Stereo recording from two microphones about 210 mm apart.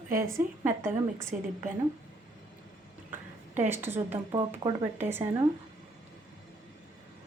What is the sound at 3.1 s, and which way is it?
A woman's voice, 10° right (ahead or behind).